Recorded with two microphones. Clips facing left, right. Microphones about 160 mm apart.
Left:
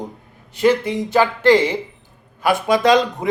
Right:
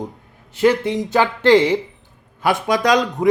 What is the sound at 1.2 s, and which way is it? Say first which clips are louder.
Speech: even; 20° right (ahead or behind).